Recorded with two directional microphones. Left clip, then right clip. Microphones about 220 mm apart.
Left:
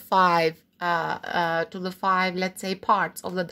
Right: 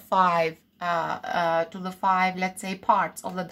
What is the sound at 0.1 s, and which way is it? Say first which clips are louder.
Speech: left 2 dB; 40° left (ahead or behind).